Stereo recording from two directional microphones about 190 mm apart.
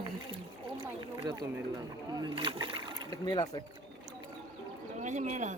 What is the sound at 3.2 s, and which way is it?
Speech, 20° left (ahead or behind).